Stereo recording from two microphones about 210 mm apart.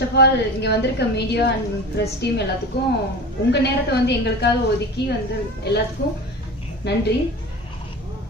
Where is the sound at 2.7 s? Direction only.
50° left (ahead or behind).